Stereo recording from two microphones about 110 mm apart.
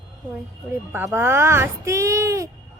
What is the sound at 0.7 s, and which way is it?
Speech, 20° right (ahead or behind).